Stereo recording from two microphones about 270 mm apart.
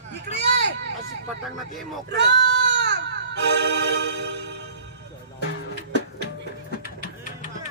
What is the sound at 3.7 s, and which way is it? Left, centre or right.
Music, right.